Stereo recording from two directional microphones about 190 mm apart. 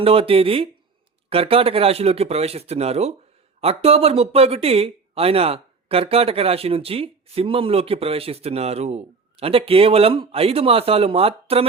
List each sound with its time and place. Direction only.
0.0 s speech: 30° right (ahead or behind)